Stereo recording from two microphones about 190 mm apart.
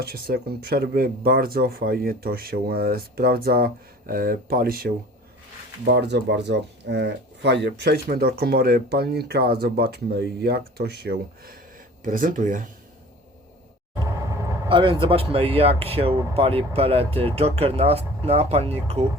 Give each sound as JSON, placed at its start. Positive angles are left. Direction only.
{"t": 0.0, "sound": "speech", "side_deg": -55}
{"t": 5.8, "sound": "speech", "side_deg": -65}
{"t": 13.9, "sound": "vehicle", "side_deg": -15}
{"t": 14.7, "sound": "speech", "side_deg": -25}